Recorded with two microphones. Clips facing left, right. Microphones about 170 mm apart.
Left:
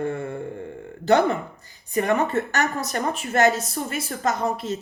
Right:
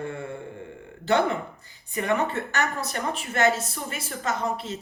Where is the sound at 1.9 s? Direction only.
40° left (ahead or behind).